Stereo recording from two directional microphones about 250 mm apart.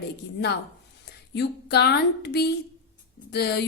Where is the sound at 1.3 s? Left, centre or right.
Left.